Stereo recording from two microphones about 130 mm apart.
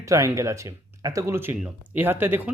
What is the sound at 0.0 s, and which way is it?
Speech, 25° right (ahead or behind).